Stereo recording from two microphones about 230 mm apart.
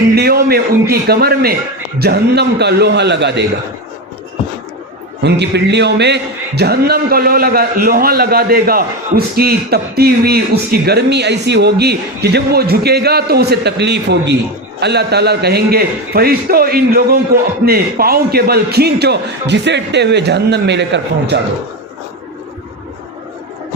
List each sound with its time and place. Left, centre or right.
0.2 s a man's voice: right
5.2 s a man's voice: right